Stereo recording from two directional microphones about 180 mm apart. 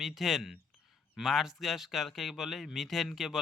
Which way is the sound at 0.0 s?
Centre (ahead or behind).